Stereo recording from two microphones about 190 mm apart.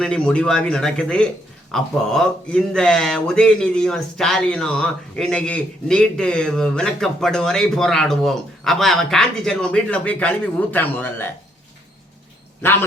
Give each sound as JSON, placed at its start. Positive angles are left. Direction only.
{"t": 0.0, "sound": "speech", "side_deg": 5}
{"t": 12.6, "sound": "a man's voice", "side_deg": 10}